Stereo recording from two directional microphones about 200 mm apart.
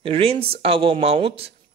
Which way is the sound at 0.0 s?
30° right (ahead or behind).